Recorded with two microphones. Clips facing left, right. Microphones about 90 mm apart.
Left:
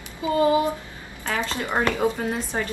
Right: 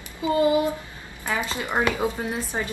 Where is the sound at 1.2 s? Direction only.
10° right (ahead or behind).